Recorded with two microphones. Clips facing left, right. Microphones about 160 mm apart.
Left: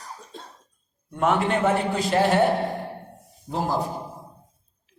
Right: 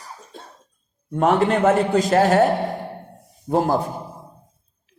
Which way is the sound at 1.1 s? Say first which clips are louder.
Right 4 dB; 35° right (ahead or behind).